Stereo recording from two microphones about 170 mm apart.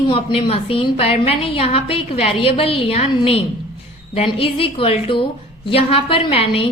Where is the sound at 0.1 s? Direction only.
35° left (ahead or behind).